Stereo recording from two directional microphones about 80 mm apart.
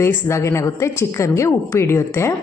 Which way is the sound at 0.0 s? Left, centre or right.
Left.